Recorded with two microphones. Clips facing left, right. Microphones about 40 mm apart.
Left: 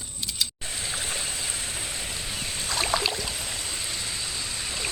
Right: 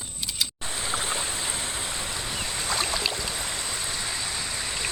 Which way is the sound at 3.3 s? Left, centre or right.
Right.